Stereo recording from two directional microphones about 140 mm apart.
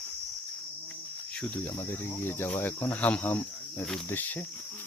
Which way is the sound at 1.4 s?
15° left (ahead or behind).